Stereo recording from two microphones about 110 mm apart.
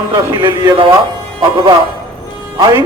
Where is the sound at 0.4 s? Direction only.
45° right (ahead or behind).